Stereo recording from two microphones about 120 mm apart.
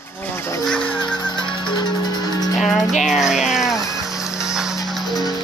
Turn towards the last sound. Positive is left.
turn(degrees=-5)  # may be behind; listen again after turning